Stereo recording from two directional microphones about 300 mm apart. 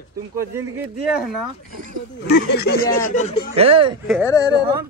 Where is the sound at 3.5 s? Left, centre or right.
Centre.